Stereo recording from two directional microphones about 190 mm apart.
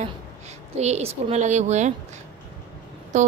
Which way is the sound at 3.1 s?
40° right (ahead or behind).